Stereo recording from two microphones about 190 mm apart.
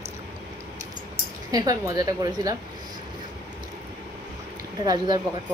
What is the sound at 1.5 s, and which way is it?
A woman's voice, 20° right (ahead or behind).